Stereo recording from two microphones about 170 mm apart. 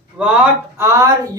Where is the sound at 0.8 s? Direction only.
15° right (ahead or behind).